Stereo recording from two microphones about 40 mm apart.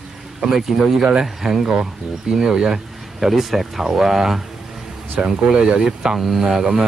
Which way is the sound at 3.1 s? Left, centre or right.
Centre.